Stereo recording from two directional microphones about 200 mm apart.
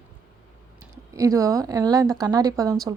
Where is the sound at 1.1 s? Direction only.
15° right (ahead or behind).